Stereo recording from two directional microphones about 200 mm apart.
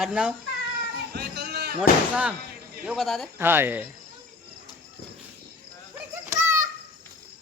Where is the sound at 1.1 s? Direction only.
55° right (ahead or behind).